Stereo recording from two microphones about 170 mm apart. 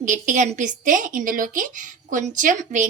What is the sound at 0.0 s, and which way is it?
Speech, 45° right (ahead or behind).